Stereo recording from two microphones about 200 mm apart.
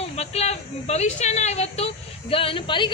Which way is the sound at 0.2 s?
30° left (ahead or behind).